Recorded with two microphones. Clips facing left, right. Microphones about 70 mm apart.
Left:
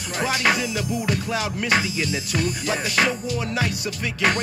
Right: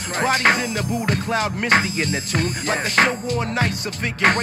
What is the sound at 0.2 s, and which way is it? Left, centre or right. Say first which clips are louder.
Music: right 3 dB; right.